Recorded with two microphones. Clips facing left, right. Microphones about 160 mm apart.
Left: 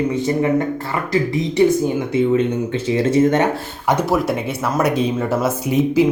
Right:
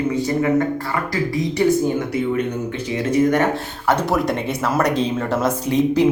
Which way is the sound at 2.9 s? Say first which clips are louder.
Left 2 dB; 30° left (ahead or behind).